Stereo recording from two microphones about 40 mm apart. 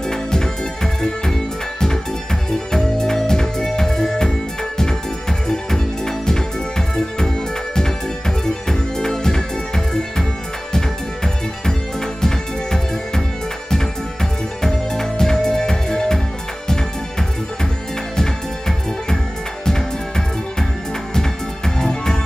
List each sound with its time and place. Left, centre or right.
0.1 s music: centre
2.5 s music: centre
8.6 s music: centre
14.6 s music: centre
21.1 s music: centre